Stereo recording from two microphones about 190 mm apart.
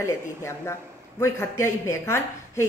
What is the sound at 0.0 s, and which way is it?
Speech, 15° left (ahead or behind).